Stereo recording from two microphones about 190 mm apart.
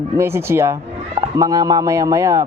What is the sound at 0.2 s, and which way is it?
A man's voice, 15° right (ahead or behind).